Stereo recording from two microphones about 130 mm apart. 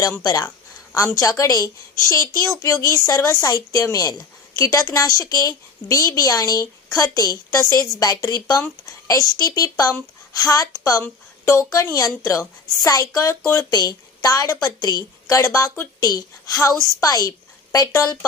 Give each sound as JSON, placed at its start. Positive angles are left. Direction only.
{"t": 0.0, "sound": "a woman's voice", "side_deg": 25}
{"t": 16.7, "sound": "a woman's voice", "side_deg": -25}
{"t": 17.0, "sound": "a woman's voice", "side_deg": 30}